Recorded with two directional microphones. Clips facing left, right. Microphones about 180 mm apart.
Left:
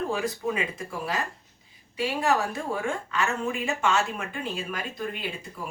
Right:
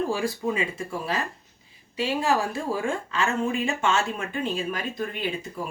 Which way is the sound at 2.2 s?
30° right (ahead or behind).